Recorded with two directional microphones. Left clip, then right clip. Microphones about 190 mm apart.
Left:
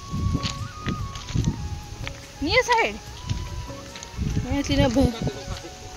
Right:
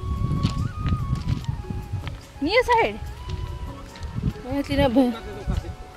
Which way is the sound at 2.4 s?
15° right (ahead or behind).